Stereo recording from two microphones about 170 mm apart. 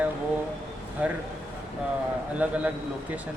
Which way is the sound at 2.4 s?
10° right (ahead or behind).